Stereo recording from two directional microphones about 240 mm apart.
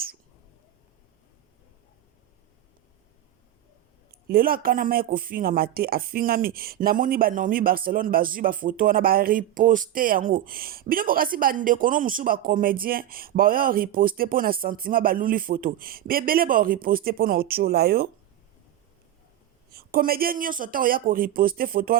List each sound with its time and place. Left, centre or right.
4.1 s speech: right
19.7 s speech: right